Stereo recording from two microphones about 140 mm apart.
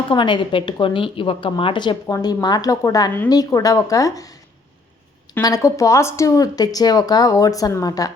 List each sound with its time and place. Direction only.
0.1 s a woman's voice: 35° left (ahead or behind)
5.4 s speech: 25° left (ahead or behind)